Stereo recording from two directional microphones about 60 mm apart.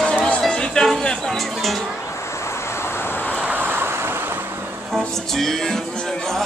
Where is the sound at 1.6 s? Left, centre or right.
Centre.